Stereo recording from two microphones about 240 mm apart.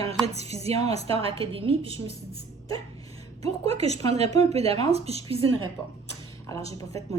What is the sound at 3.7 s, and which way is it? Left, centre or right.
Speech, right.